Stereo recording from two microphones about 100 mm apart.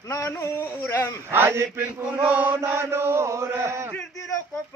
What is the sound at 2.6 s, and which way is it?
Chant, 25° right (ahead or behind).